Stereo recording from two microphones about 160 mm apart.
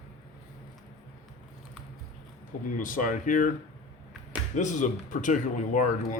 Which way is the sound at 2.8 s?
55° left (ahead or behind).